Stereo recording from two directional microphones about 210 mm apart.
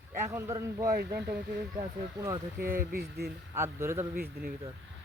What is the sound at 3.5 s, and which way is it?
Speech, 10° right (ahead or behind).